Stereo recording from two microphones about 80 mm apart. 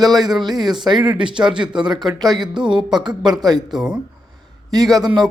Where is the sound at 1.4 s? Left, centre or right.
Right.